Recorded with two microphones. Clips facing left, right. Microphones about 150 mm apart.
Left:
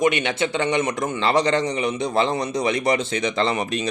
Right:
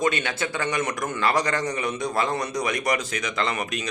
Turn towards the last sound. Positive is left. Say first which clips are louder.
# left 5 dB
turn(degrees=30)  # may be behind; listen again after turning